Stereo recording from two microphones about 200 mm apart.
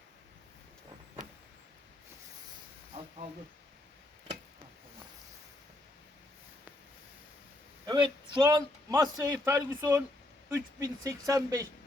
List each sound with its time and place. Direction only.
7.9 s a man's voice: 25° right (ahead or behind)